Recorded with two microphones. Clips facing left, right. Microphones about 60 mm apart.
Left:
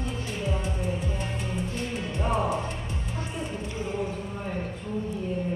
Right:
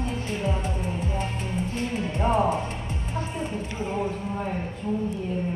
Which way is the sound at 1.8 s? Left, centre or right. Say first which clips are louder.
Right 4 dB; right.